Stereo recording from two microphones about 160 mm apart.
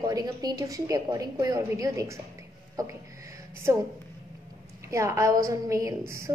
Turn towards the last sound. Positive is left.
turn(degrees=-20)  # may be behind; listen again after turning